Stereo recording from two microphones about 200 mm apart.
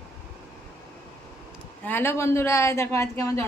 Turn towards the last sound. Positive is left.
turn(degrees=15)  # may be behind; listen again after turning